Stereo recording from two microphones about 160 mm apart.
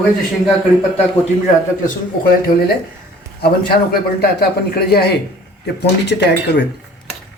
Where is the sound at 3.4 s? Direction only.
75° left (ahead or behind).